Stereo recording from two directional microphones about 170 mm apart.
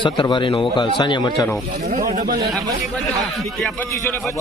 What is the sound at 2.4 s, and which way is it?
Speech, 20° right (ahead or behind).